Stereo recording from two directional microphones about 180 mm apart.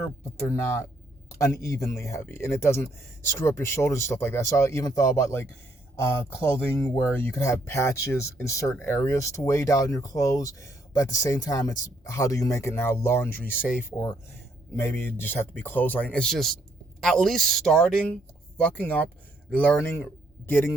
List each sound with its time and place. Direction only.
0.3 s speech: 15° left (ahead or behind)